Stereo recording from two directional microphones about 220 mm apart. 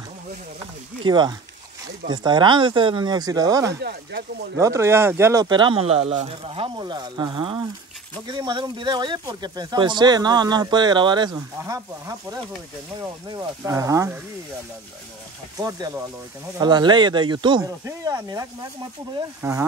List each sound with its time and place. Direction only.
1.0 s speech: 20° right (ahead or behind)
15.5 s speech: 15° right (ahead or behind)